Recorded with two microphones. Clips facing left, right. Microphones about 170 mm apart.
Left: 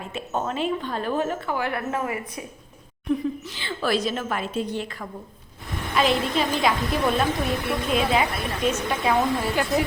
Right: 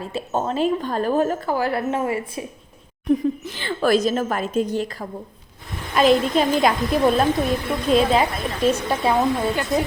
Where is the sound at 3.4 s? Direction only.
50° right (ahead or behind).